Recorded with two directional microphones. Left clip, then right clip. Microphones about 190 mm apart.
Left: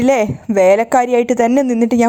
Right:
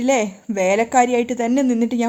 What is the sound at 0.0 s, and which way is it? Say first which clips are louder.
Speech: left 5 dB; 30° left (ahead or behind).